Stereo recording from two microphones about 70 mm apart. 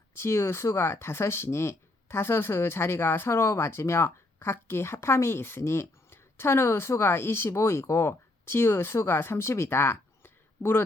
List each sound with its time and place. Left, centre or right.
0.2 s speech: left